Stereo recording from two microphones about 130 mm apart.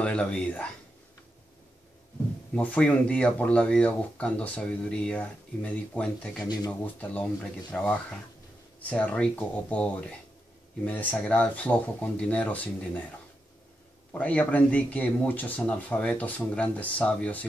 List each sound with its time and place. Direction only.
0.0 s speech: 10° left (ahead or behind)
2.5 s speech: 10° left (ahead or behind)
6.4 s speech: 30° left (ahead or behind)
6.8 s speech: 10° left (ahead or behind)
14.1 s speech: 10° left (ahead or behind)